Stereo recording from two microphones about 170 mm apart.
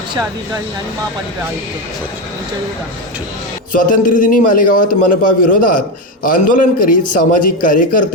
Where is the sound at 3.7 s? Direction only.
55° left (ahead or behind).